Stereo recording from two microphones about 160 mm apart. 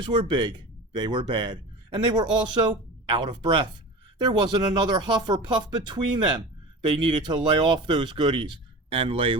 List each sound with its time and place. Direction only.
0.0 s speech: 30° right (ahead or behind)